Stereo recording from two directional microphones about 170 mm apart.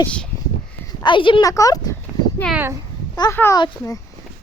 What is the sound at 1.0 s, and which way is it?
Speech, 30° left (ahead or behind).